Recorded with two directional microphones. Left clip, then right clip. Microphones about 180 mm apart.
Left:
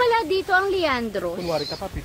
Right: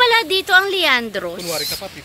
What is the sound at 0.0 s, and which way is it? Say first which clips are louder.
Speech: right 5 dB; 5° right (ahead or behind).